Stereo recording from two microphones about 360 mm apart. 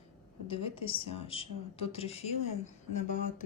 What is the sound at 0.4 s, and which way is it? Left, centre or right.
A woman's voice, centre.